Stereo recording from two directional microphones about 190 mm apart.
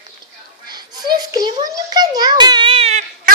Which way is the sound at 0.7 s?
20° right (ahead or behind).